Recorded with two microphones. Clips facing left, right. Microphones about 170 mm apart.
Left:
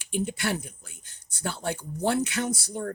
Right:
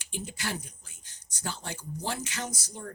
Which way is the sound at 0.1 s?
60° left (ahead or behind).